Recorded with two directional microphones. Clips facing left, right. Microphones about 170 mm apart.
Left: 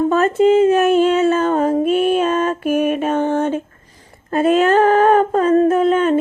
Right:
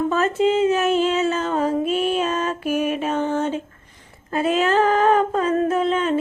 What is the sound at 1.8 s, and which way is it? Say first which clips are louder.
Music: left 6 dB; 55° left (ahead or behind).